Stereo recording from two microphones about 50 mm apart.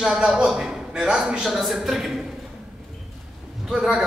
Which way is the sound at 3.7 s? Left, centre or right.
Centre.